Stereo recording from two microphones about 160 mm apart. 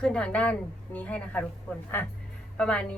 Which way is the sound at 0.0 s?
5° left (ahead or behind).